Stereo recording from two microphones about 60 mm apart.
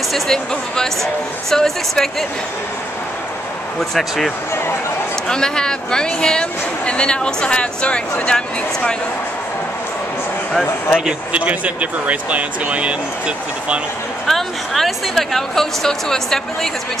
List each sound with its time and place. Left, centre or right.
0.1 s speech: centre
5.3 s speech: centre
11.1 s speech: right
14.2 s a woman's voice: centre